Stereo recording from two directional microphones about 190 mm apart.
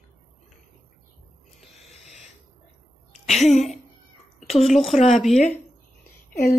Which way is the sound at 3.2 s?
Centre (ahead or behind).